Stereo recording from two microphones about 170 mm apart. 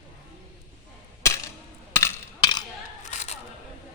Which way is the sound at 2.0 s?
25° left (ahead or behind).